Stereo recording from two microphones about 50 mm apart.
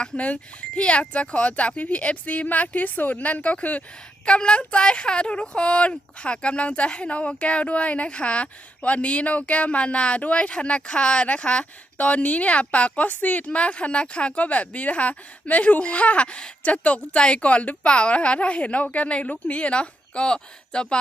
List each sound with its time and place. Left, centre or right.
0.8 s speech: left